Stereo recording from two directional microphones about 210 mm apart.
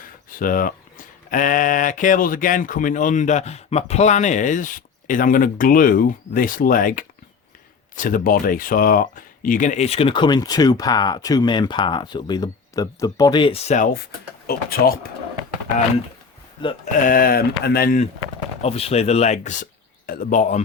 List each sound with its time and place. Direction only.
0.3 s speech: 40° left (ahead or behind)
16.6 s speech: 25° left (ahead or behind)
17.0 s speech: 40° left (ahead or behind)
18.6 s speech: 30° left (ahead or behind)